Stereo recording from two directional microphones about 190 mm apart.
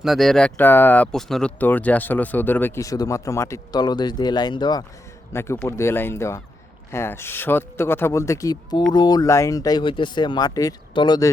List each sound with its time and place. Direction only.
0.0 s speech: centre (ahead or behind); by 11.3 s 25° left (ahead or behind)